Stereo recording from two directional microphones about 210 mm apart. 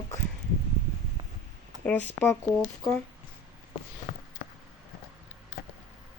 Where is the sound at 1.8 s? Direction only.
10° left (ahead or behind).